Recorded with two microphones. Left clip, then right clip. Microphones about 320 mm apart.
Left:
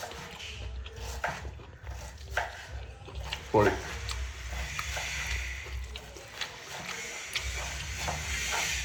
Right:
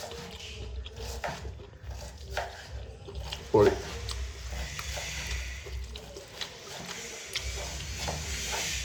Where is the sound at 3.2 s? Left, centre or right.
Centre.